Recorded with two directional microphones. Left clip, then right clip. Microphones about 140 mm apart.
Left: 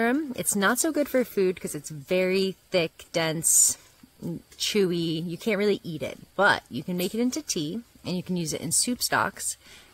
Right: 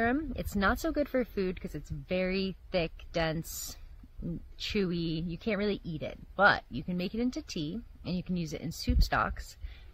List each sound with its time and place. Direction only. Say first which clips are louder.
0.0 s speech: left 5 dB; 30° left (ahead or behind)